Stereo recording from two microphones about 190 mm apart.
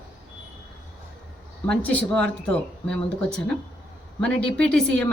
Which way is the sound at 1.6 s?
10° left (ahead or behind).